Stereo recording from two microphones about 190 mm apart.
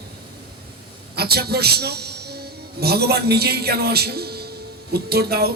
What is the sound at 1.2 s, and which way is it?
A man's voice, 55° right (ahead or behind).